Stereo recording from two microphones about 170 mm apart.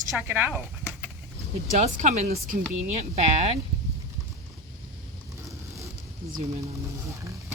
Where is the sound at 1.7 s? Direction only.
40° right (ahead or behind).